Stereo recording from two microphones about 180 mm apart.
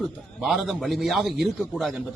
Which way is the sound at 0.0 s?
Centre (ahead or behind).